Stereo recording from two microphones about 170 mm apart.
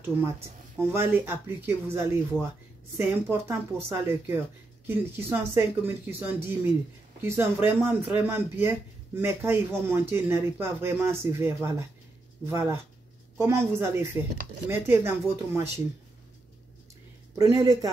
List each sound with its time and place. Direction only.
0.7 s speech: 15° right (ahead or behind)
17.4 s speech: 20° right (ahead or behind)